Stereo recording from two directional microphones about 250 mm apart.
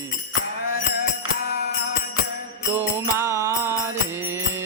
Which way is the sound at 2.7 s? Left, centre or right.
Centre.